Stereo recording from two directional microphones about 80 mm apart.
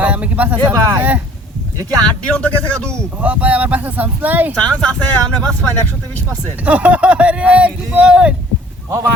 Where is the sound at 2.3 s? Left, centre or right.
Centre.